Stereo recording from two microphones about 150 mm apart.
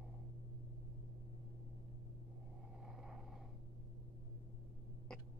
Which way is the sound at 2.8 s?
5° right (ahead or behind).